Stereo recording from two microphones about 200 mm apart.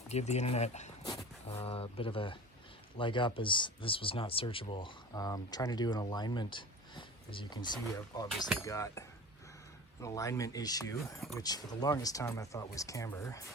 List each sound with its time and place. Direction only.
0.1 s speech: 35° left (ahead or behind); by 13.4 s 15° left (ahead or behind)